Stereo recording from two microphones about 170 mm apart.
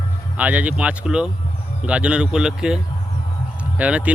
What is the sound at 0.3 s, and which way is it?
Speech, 10° right (ahead or behind).